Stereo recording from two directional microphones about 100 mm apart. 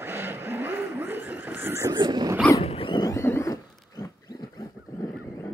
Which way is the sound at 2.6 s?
65° left (ahead or behind).